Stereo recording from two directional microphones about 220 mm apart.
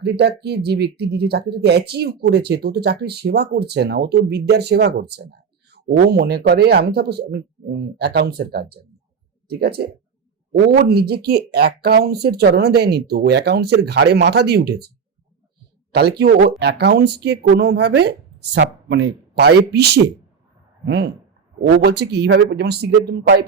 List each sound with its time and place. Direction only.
0.0 s speech: 50° right (ahead or behind)
15.9 s speech: 45° right (ahead or behind)